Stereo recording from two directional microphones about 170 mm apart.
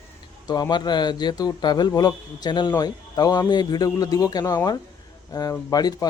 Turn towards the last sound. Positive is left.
turn(degrees=25)  # may be behind; listen again after turning